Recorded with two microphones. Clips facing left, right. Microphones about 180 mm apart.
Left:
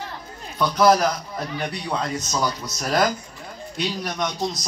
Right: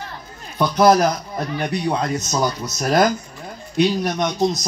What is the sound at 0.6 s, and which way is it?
Speech, 25° right (ahead or behind).